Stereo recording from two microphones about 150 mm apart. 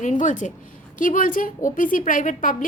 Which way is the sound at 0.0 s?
55° left (ahead or behind).